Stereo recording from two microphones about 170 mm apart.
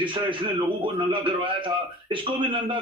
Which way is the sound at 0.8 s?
30° right (ahead or behind).